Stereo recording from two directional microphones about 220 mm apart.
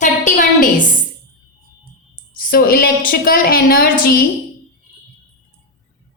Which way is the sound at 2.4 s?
40° left (ahead or behind).